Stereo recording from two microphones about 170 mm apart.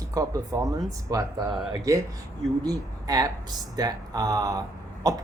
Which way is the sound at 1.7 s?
20° right (ahead or behind).